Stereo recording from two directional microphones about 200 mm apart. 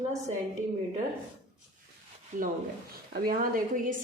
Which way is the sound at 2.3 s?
40° right (ahead or behind).